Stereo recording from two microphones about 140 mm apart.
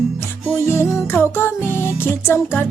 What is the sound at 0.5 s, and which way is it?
Music, 20° left (ahead or behind).